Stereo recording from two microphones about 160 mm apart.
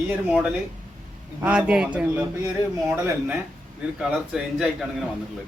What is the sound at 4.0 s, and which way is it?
A man's voice, 5° right (ahead or behind).